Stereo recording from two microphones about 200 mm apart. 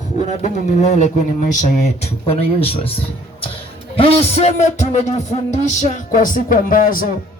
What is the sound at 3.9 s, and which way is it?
Speech, 30° left (ahead or behind).